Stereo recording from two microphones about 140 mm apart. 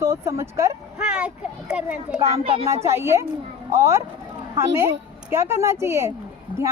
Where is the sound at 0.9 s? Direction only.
5° right (ahead or behind).